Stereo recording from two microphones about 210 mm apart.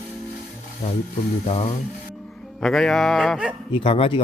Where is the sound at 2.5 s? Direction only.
Centre (ahead or behind).